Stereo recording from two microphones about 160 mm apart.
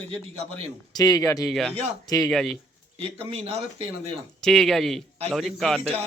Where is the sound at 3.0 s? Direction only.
40° right (ahead or behind).